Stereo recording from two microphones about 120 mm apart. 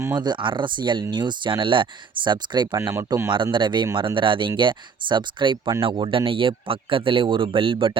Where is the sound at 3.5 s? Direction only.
40° right (ahead or behind).